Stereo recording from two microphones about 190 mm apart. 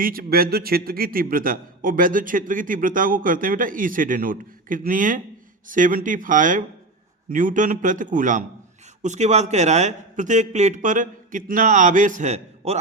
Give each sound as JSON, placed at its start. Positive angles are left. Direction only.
{"t": 0.0, "sound": "a man's voice", "side_deg": -50}